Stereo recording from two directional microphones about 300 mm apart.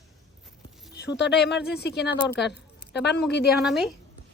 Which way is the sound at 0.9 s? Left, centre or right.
Left.